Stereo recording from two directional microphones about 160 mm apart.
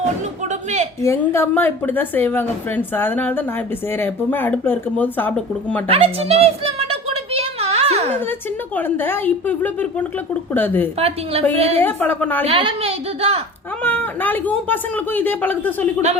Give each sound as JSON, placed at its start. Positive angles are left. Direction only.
{"t": 0.4, "sound": "a sound", "side_deg": -45}
{"t": 1.0, "sound": "a woman's voice", "side_deg": 15}
{"t": 5.9, "sound": "a sound", "side_deg": -40}
{"t": 8.3, "sound": "a woman's voice", "side_deg": 10}
{"t": 10.9, "sound": "a woman's voice", "side_deg": -40}
{"t": 11.8, "sound": "a woman's voice", "side_deg": 10}
{"t": 12.5, "sound": "a woman's voice", "side_deg": -35}
{"t": 13.8, "sound": "a woman's voice", "side_deg": 10}